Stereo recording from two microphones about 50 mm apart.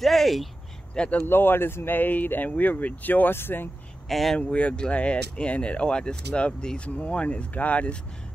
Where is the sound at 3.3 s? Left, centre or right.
Left.